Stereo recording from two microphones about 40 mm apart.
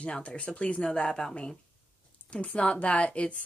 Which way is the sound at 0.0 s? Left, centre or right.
Left.